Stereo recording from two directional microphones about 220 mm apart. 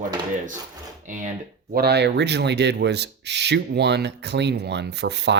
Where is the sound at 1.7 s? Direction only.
50° right (ahead or behind).